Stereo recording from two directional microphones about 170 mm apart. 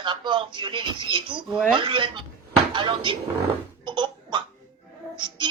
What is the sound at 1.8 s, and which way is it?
Speech, 30° right (ahead or behind).